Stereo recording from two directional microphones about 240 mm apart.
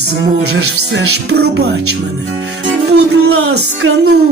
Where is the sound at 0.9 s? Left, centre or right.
Right.